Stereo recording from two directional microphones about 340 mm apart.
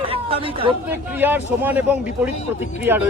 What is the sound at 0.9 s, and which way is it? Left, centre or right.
Speech, centre.